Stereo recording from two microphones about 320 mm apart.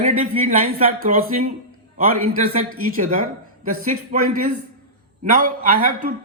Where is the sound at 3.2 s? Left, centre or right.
Right.